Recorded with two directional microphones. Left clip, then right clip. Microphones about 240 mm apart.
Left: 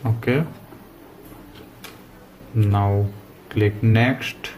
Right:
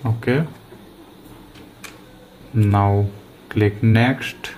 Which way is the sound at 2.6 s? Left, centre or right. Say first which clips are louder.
Right 4 dB; right.